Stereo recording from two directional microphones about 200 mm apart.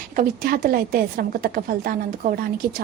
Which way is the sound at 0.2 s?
45° right (ahead or behind).